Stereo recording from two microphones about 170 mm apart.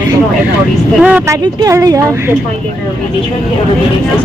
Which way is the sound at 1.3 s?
20° right (ahead or behind).